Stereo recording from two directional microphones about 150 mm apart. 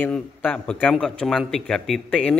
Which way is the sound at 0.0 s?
10° left (ahead or behind).